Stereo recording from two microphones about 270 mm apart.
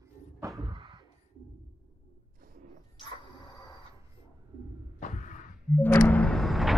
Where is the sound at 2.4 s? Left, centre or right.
Right.